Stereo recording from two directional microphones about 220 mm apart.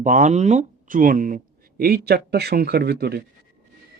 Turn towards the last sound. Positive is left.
turn(degrees=-45)  # may be behind; listen again after turning